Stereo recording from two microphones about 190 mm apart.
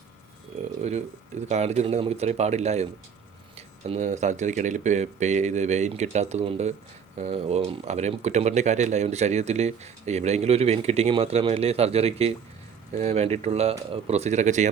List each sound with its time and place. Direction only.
0.8 s speech: 35° right (ahead or behind)